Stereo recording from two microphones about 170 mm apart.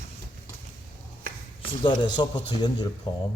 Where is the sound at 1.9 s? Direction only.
25° left (ahead or behind).